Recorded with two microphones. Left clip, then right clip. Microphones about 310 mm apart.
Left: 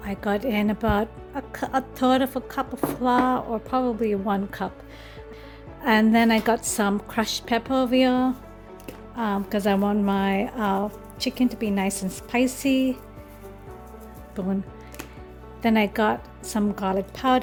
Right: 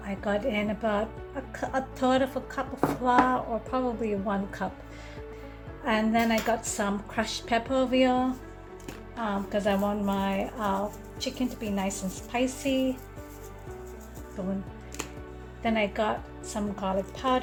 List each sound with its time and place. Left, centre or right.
0.0 s a woman's voice: left
5.8 s a woman's voice: left
15.6 s a woman's voice: left